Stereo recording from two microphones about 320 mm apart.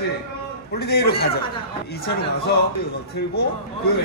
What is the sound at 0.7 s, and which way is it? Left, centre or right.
Speech, left.